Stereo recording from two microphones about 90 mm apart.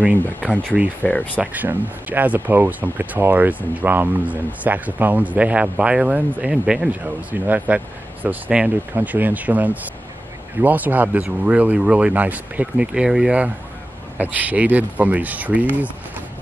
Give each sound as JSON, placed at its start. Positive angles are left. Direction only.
{"t": 0.6, "sound": "speech", "side_deg": -15}
{"t": 1.0, "sound": "speech", "side_deg": 15}
{"t": 1.4, "sound": "speech", "side_deg": -20}